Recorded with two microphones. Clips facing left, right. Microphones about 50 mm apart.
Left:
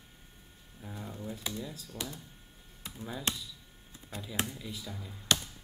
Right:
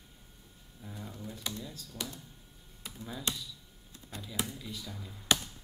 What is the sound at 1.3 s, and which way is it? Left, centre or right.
Speech, centre.